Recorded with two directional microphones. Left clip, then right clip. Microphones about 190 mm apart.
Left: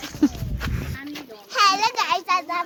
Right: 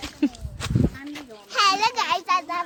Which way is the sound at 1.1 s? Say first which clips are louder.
Left 3 dB; 15° right (ahead or behind).